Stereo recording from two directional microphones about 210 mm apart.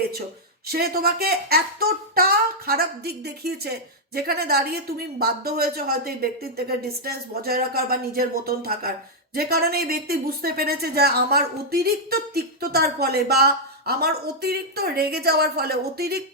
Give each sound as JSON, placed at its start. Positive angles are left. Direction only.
{"t": 0.7, "sound": "a woman's voice", "side_deg": -45}